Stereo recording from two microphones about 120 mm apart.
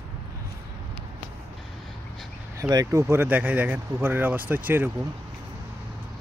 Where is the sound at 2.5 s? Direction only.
25° right (ahead or behind).